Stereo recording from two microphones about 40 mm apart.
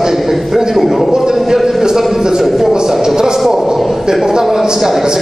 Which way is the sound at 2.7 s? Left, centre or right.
Centre.